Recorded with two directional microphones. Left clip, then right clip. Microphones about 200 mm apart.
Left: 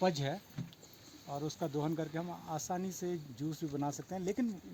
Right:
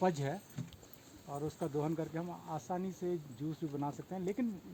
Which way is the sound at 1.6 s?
60° left (ahead or behind).